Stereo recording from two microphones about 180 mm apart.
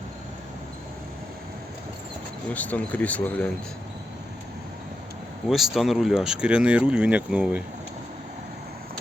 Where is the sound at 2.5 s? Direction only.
10° left (ahead or behind).